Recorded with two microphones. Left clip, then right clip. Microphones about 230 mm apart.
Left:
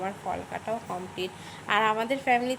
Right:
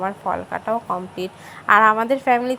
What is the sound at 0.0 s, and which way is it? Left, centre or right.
A woman's voice, centre.